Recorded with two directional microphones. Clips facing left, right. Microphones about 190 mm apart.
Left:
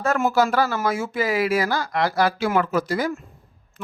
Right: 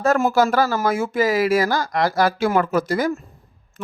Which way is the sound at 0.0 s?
40° right (ahead or behind).